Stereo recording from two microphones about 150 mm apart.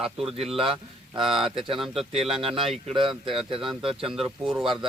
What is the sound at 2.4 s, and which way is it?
Speech, 40° right (ahead or behind).